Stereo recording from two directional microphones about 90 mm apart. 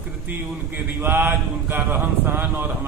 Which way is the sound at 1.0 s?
25° right (ahead or behind).